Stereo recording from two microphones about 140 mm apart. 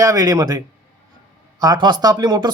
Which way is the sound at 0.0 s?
25° right (ahead or behind).